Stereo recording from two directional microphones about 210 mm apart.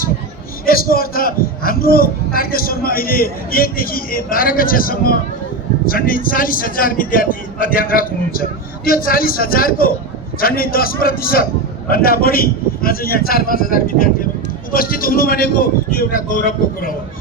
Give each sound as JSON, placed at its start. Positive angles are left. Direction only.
{"t": 0.6, "sound": "a man's voice", "side_deg": 45}